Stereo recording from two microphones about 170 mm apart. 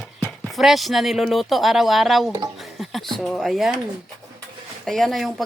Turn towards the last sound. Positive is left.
turn(degrees=0)  # may be behind; listen again after turning